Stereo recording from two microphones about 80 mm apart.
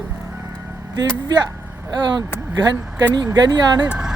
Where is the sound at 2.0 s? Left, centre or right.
Right.